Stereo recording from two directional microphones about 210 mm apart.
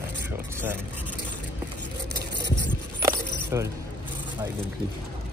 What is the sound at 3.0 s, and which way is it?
Keys jangling, 15° right (ahead or behind).